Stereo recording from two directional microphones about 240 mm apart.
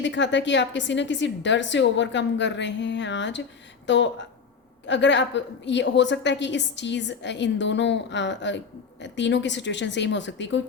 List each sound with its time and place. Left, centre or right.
0.0 s a woman's voice: left